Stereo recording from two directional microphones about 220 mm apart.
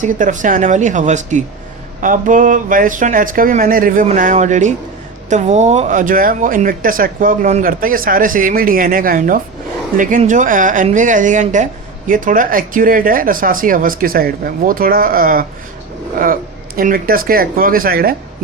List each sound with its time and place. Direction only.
0.0 s speech: 35° right (ahead or behind)